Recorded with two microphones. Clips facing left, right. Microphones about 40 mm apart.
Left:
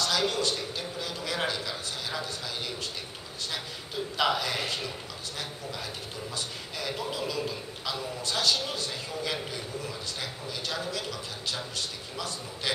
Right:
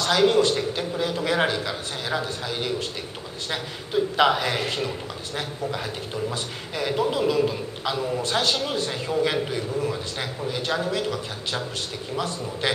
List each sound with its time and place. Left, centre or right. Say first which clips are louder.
0.0 s a man's voice: right 9 dB; right
6.3 s a man's voice: right 6 dB; right
12.2 s a man's voice: right 8 dB; right